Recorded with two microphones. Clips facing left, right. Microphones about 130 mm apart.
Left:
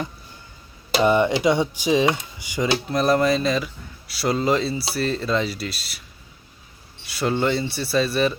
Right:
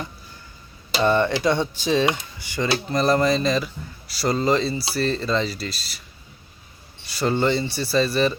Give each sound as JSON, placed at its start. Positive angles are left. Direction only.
{"t": 0.9, "sound": "speech", "side_deg": 15}
{"t": 2.6, "sound": "speech", "side_deg": 5}
{"t": 7.1, "sound": "speech", "side_deg": 0}